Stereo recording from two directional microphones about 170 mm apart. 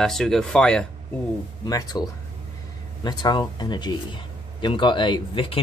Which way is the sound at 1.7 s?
20° left (ahead or behind).